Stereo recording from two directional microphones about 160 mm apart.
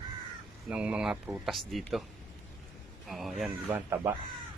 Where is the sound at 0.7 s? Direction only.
5° right (ahead or behind).